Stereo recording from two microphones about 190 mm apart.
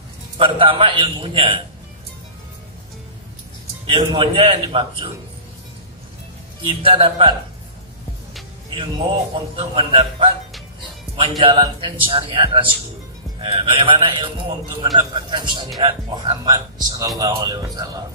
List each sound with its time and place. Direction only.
0.4 s a man's voice: 25° right (ahead or behind)
3.8 s a man's voice: 25° right (ahead or behind)
6.6 s a man's voice: 30° right (ahead or behind)
9.6 s a man's voice: 30° right (ahead or behind)